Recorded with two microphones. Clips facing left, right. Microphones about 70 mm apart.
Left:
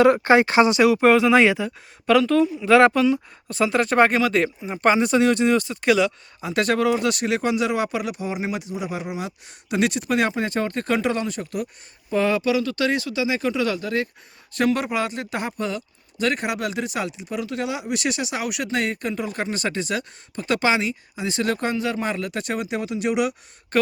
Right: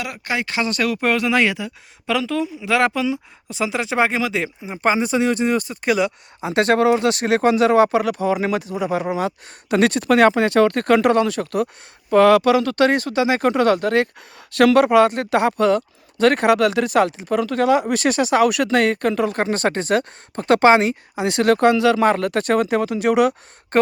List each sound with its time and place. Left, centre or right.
0.0 s speech: left
0.7 s speech: centre
5.8 s speech: centre
6.4 s speech: right
8.4 s speech: right
8.7 s speech: right
22.0 s speech: right